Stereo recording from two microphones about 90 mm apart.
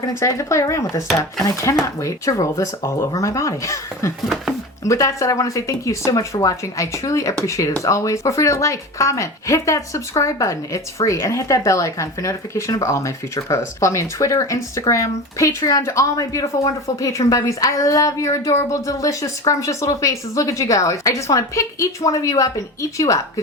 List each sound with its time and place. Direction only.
0.1 s speech: 30° left (ahead or behind)